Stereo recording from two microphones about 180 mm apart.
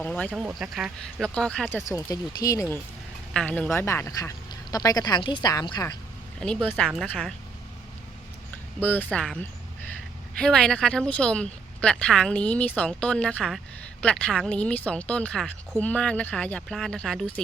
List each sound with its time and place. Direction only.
0.0 s speech: 10° left (ahead or behind)
0.4 s speech: 5° right (ahead or behind)
1.9 s a woman's voice: 20° left (ahead or behind)
6.4 s speech: 5° left (ahead or behind)
8.8 s speech: 10° left (ahead or behind)